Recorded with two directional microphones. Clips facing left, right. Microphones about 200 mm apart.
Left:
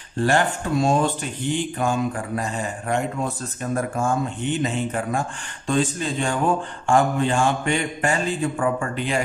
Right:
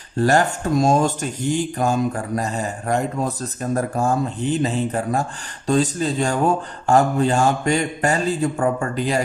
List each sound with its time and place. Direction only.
0.2 s speech: 40° right (ahead or behind)